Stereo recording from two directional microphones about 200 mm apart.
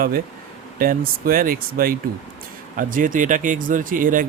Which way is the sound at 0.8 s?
45° right (ahead or behind).